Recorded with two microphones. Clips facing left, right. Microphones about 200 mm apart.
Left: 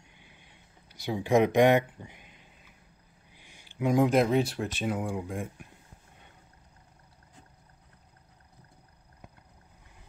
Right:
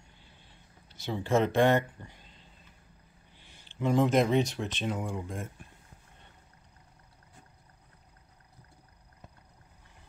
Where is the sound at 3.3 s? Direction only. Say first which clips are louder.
Left 3 dB; 10° left (ahead or behind).